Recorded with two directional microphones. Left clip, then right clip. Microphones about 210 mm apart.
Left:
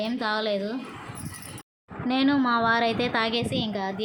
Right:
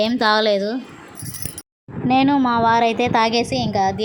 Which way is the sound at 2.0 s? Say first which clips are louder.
Right 7 dB; 20° right (ahead or behind).